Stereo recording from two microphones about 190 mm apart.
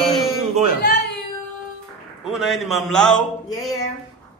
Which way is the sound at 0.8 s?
60° left (ahead or behind).